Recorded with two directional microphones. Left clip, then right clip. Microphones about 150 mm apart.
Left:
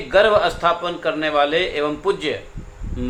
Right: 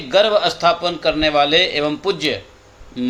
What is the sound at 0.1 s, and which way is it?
Speech, 40° right (ahead or behind).